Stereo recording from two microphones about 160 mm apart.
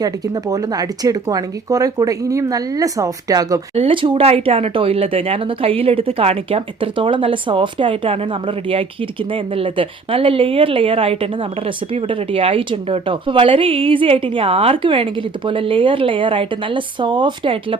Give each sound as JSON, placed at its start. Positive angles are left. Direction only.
{"t": 0.0, "sound": "speech", "side_deg": -20}
{"t": 3.8, "sound": "speech", "side_deg": -35}